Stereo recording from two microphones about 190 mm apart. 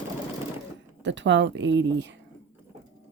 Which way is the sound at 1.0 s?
70° right (ahead or behind).